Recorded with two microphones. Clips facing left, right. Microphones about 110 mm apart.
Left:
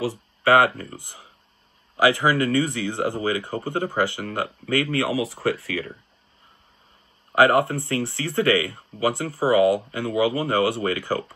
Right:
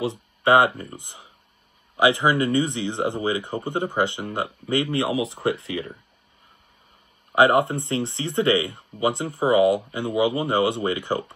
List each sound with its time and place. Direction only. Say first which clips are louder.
0.0 s speech: even; 20° right (ahead or behind)
7.3 s speech: even; 20° right (ahead or behind)